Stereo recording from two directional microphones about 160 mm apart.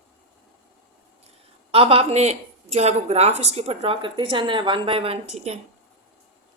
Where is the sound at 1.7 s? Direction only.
35° right (ahead or behind).